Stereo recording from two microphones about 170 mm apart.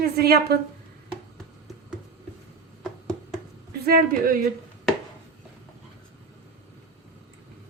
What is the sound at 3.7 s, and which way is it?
Speech, 65° right (ahead or behind).